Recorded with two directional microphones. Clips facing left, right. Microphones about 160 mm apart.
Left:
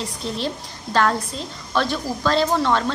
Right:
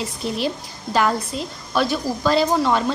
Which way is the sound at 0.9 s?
10° right (ahead or behind).